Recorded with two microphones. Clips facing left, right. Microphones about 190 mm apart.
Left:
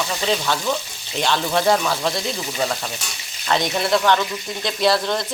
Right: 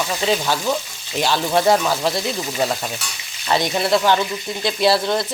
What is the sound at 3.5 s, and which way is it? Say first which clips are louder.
Speech: right 1 dB; 5° right (ahead or behind).